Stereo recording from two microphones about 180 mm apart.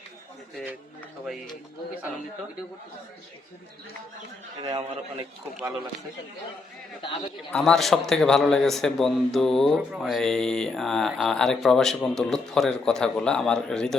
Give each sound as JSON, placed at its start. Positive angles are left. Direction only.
{"t": 1.2, "sound": "a man's voice", "side_deg": 0}
{"t": 4.6, "sound": "a man's voice", "side_deg": -25}
{"t": 7.0, "sound": "a man's voice", "side_deg": 30}
{"t": 7.5, "sound": "a man's voice", "side_deg": 0}